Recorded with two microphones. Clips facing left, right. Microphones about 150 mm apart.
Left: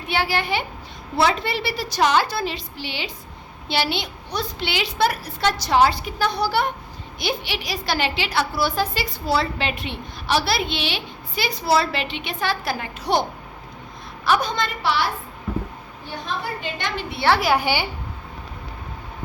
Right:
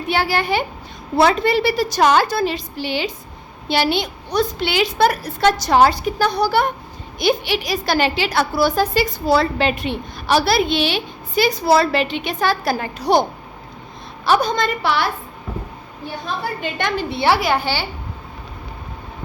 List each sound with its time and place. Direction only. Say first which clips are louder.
0.1 s a woman's voice: right 4 dB; 40° right (ahead or behind)
14.3 s a woman's voice: right 4 dB; 35° right (ahead or behind); by 15.0 s 55° right (ahead or behind)
16.6 s a woman's voice: right 6 dB; 55° right (ahead or behind)
17.4 s a woman's voice: even; 10° left (ahead or behind)